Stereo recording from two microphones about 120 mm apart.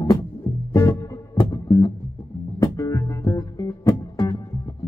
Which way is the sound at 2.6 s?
25° left (ahead or behind).